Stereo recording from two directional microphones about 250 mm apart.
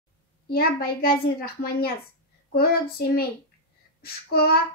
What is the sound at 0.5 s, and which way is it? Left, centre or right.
A woman's voice, left.